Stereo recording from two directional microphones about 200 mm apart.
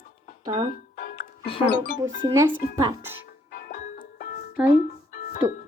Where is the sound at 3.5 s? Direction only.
50° left (ahead or behind).